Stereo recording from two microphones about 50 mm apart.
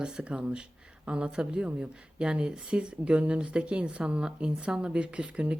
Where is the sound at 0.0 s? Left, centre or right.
Centre.